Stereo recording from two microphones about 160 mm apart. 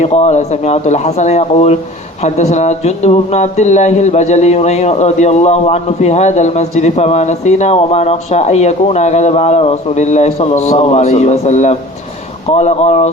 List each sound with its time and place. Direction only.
0.0 s a man's voice: 45° left (ahead or behind)